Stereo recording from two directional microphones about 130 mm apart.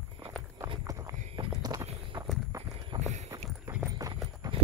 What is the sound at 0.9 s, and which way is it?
Clip-clop, 25° right (ahead or behind).